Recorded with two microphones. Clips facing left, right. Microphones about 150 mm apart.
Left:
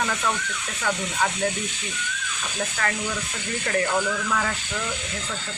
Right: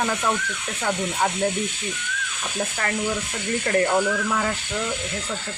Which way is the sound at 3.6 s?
30° right (ahead or behind).